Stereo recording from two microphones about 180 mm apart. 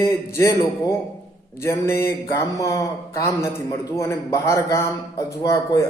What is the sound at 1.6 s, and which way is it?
A man's voice, 15° left (ahead or behind).